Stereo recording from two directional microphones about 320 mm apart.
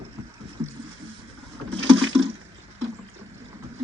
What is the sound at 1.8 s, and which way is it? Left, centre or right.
Boat, right.